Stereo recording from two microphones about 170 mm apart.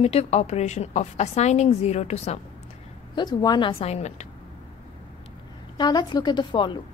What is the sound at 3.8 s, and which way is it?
Speech, 40° left (ahead or behind).